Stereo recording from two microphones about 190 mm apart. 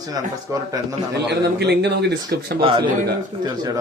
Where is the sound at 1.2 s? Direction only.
60° right (ahead or behind).